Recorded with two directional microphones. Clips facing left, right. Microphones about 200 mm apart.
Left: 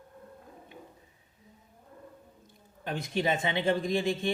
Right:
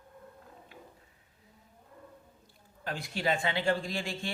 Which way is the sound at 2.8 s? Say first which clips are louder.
Left 4 dB; 20° left (ahead or behind).